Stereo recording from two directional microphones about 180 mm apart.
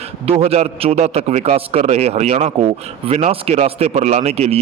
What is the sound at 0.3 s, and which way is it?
A man's voice, 35° right (ahead or behind).